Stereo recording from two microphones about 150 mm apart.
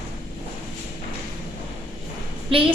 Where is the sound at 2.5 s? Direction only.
35° right (ahead or behind).